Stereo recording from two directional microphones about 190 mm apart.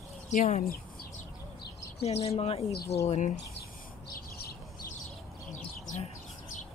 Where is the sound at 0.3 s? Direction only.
40° left (ahead or behind).